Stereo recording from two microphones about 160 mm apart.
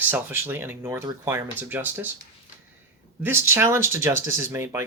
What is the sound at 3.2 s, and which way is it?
Speech, 15° right (ahead or behind).